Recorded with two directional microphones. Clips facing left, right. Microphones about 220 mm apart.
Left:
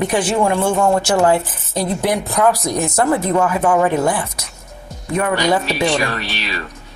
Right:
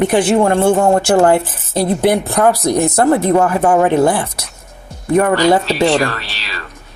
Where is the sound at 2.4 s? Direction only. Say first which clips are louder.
Right 4 dB; 55° right (ahead or behind).